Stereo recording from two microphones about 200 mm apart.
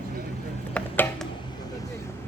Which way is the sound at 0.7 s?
5° left (ahead or behind).